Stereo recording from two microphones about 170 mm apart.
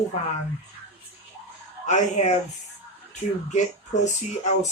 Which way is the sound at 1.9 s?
45° left (ahead or behind).